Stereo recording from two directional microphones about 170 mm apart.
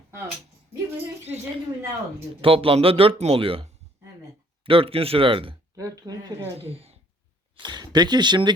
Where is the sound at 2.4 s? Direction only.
35° right (ahead or behind).